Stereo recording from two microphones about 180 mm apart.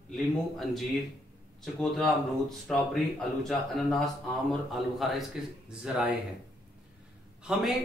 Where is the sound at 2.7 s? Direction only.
Centre (ahead or behind).